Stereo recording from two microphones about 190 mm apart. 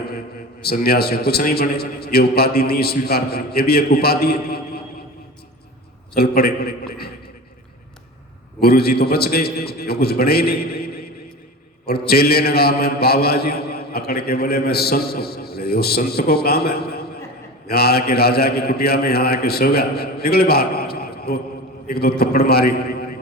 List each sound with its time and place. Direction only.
0.6 s a man's voice: 55° left (ahead or behind)
6.1 s a man's voice: 55° left (ahead or behind)
8.6 s a man's voice: 55° left (ahead or behind)